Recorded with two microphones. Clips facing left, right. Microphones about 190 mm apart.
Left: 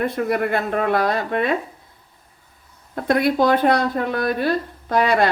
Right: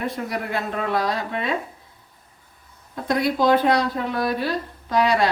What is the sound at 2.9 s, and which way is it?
Speech, 60° left (ahead or behind).